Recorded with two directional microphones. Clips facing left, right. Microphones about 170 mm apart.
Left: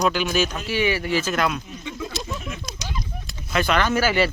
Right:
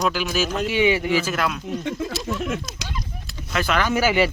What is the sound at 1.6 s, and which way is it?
Speech, 65° right (ahead or behind).